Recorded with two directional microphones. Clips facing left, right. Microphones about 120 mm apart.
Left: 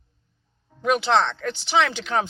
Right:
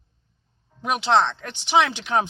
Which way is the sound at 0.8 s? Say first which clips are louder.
Even; 15° right (ahead or behind).